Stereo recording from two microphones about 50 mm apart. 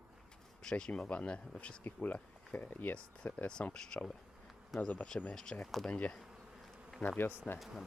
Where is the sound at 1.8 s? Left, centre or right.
Left.